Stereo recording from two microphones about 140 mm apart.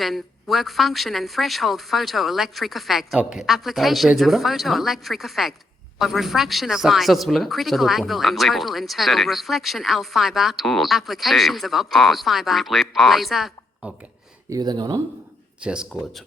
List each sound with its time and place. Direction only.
0.0 s speech: centre (ahead or behind)
14.5 s speech: 30° right (ahead or behind)
15.6 s speech: 5° right (ahead or behind)